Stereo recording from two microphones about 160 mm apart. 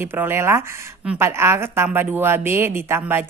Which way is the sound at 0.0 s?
15° right (ahead or behind).